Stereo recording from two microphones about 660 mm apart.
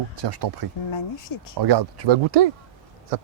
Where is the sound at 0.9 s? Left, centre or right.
Left.